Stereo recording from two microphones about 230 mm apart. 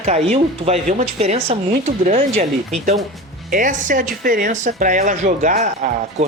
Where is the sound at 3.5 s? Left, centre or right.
Right.